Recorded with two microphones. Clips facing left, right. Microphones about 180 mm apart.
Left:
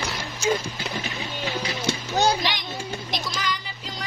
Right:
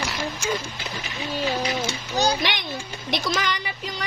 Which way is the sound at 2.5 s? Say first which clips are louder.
Even; 65° right (ahead or behind).